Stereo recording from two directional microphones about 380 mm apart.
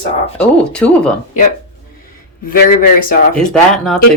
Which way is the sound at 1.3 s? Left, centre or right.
Centre.